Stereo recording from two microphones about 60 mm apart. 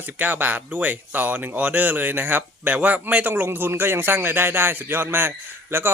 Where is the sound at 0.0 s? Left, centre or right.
Right.